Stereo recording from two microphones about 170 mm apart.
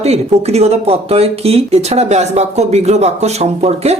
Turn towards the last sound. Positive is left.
turn(degrees=-40)  # may be behind; listen again after turning